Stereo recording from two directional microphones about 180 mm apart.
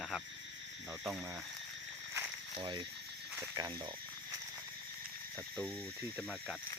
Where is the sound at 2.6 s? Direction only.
25° right (ahead or behind).